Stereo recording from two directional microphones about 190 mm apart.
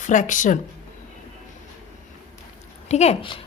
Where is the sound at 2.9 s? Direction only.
35° left (ahead or behind).